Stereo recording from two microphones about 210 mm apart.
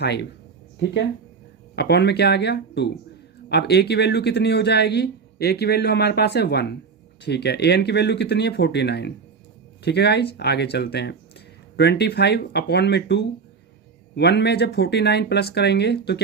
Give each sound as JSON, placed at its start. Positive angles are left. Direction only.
{"t": 0.0, "sound": "speech", "side_deg": 55}
{"t": 1.7, "sound": "speech", "side_deg": 50}